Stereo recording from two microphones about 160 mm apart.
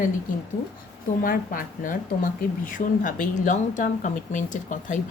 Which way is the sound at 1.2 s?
60° left (ahead or behind).